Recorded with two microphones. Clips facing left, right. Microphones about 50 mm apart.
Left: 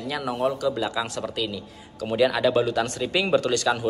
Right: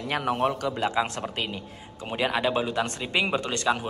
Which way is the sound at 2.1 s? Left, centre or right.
Right.